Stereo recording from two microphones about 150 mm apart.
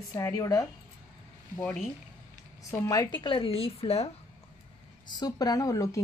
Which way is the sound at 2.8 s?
25° left (ahead or behind).